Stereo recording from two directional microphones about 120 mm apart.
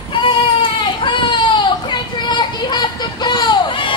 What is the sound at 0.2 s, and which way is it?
Baby cry, 45° left (ahead or behind).